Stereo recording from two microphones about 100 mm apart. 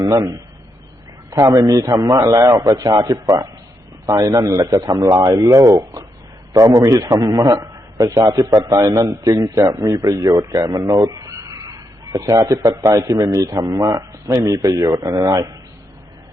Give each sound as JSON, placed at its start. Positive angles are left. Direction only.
{"t": 0.0, "sound": "a man's voice", "side_deg": -35}